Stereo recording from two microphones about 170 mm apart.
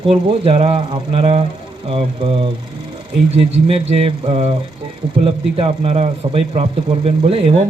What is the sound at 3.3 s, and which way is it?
A man's voice, 35° right (ahead or behind).